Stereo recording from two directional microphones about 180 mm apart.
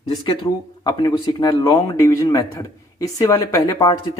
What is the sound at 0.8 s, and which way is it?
Speech, 20° left (ahead or behind).